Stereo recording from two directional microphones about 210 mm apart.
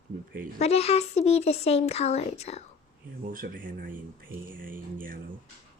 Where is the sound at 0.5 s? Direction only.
30° left (ahead or behind).